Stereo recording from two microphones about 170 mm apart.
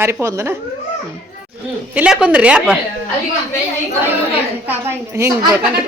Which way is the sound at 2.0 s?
5° right (ahead or behind).